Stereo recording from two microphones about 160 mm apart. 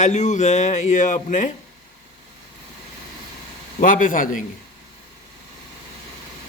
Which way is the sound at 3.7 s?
55° left (ahead or behind).